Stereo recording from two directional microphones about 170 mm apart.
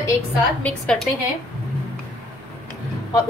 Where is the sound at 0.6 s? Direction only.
5° left (ahead or behind).